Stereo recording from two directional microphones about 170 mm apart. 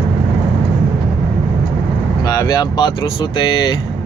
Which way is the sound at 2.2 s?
25° left (ahead or behind).